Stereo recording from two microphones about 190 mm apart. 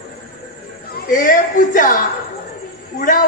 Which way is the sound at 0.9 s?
45° left (ahead or behind).